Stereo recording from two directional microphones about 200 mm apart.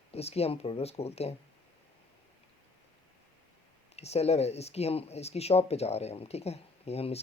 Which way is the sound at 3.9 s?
30° left (ahead or behind).